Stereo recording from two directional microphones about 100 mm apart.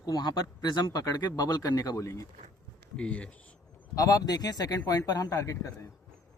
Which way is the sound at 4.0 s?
35° left (ahead or behind).